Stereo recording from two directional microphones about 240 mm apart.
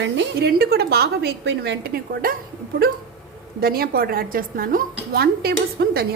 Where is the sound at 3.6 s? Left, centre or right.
Right.